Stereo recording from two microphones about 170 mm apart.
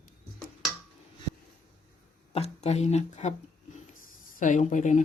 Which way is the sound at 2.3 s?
40° left (ahead or behind).